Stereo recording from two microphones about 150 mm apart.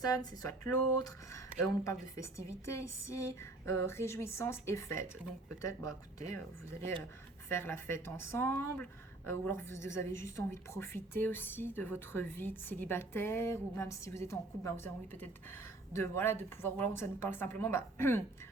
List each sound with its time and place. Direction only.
0.0 s speech: 25° left (ahead or behind)
7.5 s speech: 15° left (ahead or behind)